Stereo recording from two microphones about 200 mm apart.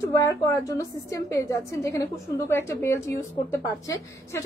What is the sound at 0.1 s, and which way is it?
A woman's voice, 15° left (ahead or behind).